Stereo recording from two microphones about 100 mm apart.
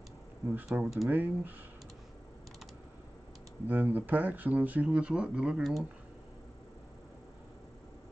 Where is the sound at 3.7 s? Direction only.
15° right (ahead or behind).